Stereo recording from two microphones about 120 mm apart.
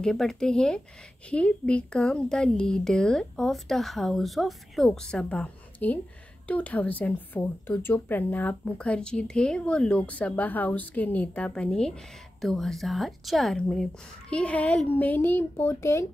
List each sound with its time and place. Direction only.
0.0 s a woman's voice: 5° left (ahead or behind); by 16.1 s 25° left (ahead or behind)